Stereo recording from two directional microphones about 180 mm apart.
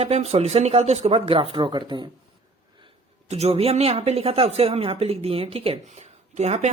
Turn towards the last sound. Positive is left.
turn(degrees=-40)  # may be behind; listen again after turning